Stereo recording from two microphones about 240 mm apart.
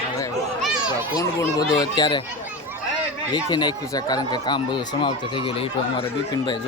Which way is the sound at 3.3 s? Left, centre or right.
Centre.